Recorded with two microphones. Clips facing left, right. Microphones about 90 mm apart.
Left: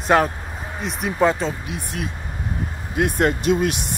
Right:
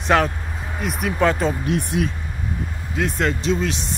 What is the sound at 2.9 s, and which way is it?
Speech, 55° left (ahead or behind).